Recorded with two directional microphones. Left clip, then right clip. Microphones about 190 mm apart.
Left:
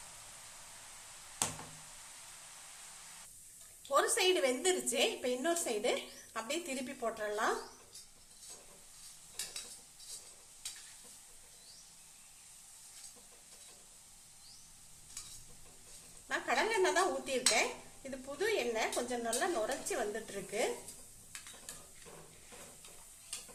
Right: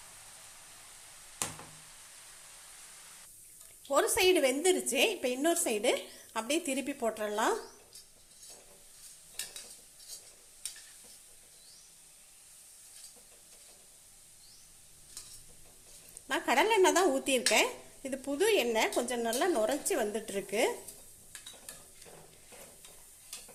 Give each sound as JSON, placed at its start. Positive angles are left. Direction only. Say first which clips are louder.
{"t": 3.9, "sound": "a woman's voice", "louder": "right 4 dB", "side_deg": -30}
{"t": 16.3, "sound": "dishes", "louder": "right 6 dB", "side_deg": -40}
{"t": 18.3, "sound": "a woman's voice", "louder": "right 6 dB", "side_deg": -40}